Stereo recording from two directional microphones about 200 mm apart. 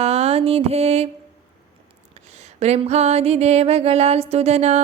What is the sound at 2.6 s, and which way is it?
Music, 30° right (ahead or behind).